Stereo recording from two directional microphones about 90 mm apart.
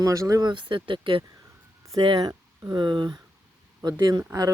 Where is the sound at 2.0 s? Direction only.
55° right (ahead or behind).